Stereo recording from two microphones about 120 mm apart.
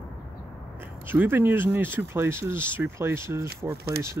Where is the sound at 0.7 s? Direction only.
15° right (ahead or behind).